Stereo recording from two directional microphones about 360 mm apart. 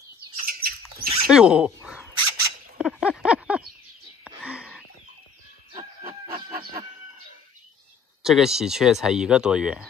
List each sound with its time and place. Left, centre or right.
0.5 s a sound: right
1.2 s speech: centre
2.1 s bird: right
2.8 s a sound: centre
4.2 s whispering: centre
8.2 s speech: centre